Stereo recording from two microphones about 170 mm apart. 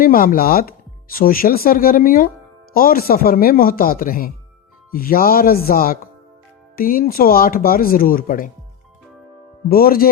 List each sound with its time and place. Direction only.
0.0 s speech: 55° left (ahead or behind)
9.6 s speech: 60° left (ahead or behind)